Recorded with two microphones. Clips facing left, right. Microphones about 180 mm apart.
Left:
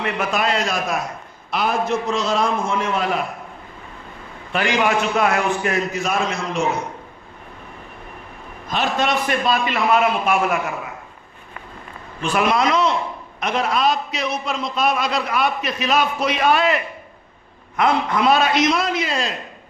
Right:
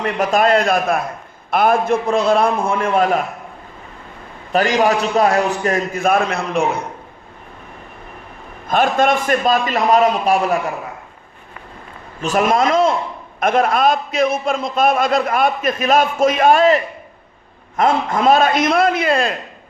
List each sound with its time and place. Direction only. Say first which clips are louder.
0.0 s a man's voice: right 6 dB; 45° right (ahead or behind)
4.5 s a man's voice: right 4 dB; 40° right (ahead or behind); by 6.8 s 60° right (ahead or behind)
8.6 s a man's voice: right 6 dB; 50° right (ahead or behind)
12.2 s a man's voice: right 3 dB; 45° right (ahead or behind)